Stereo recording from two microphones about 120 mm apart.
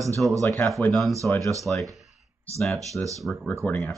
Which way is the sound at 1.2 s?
15° left (ahead or behind).